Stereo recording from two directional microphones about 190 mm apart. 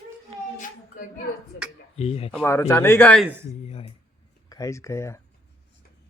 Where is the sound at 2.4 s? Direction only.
15° left (ahead or behind).